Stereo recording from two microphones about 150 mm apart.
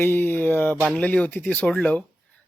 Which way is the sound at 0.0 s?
15° left (ahead or behind).